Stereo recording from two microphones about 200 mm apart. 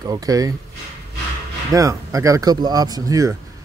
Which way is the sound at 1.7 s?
15° right (ahead or behind).